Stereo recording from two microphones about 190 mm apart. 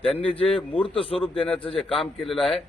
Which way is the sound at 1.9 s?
Centre (ahead or behind).